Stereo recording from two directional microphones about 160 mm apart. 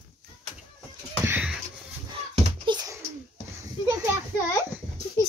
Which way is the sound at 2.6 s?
25° right (ahead or behind).